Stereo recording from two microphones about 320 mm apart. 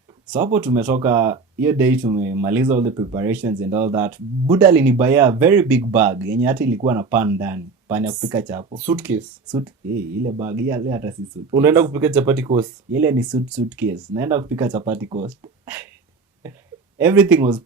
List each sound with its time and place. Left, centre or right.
0.3 s speech: centre
9.9 s speech: right
10.7 s speech: centre
15.6 s a sound: centre
17.0 s speech: centre